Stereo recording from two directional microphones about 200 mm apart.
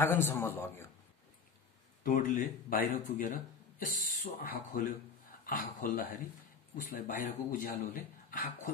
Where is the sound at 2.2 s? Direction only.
40° left (ahead or behind).